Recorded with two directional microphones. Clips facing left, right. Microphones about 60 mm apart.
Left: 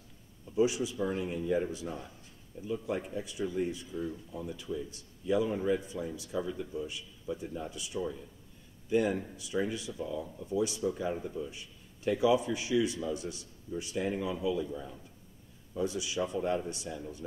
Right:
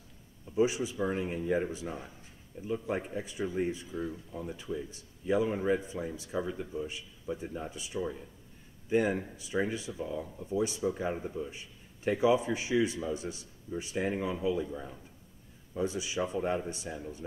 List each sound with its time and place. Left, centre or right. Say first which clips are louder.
0.6 s speech: even; right
3.9 s speech: even; centre
4.3 s speech: even; right